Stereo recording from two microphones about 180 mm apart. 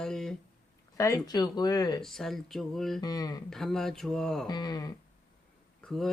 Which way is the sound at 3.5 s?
Centre (ahead or behind).